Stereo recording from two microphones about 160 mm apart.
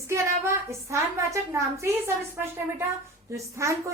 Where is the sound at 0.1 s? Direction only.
15° right (ahead or behind).